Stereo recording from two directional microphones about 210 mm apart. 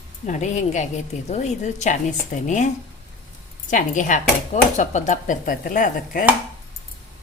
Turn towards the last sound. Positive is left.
turn(degrees=40)  # may be behind; listen again after turning